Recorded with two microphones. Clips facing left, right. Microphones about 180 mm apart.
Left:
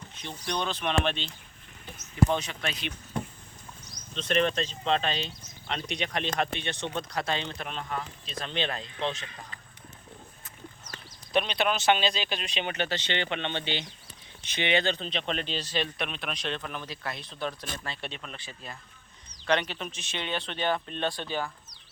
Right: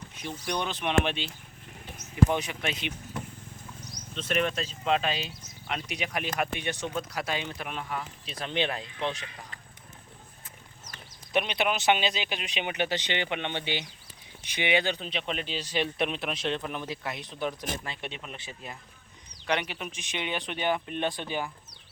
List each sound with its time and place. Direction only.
0.2 s speech: 10° right (ahead or behind)
2.3 s speech: 15° right (ahead or behind)
4.1 s speech: 5° right (ahead or behind)
11.3 s speech: 15° right (ahead or behind)